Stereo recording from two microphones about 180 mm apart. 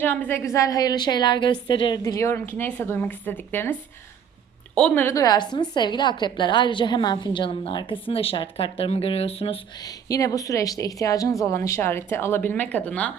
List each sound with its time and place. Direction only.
0.0 s a woman's voice: 10° left (ahead or behind); by 9.9 s 30° left (ahead or behind)
10.1 s a woman's voice: 20° left (ahead or behind)